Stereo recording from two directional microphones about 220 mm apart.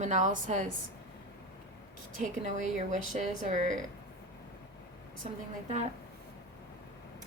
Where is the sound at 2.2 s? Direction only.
35° right (ahead or behind).